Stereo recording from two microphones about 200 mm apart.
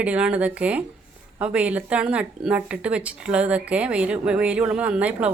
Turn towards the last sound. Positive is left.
turn(degrees=-5)  # may be behind; listen again after turning